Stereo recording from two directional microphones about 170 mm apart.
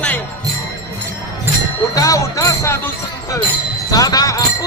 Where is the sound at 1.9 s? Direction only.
20° left (ahead or behind).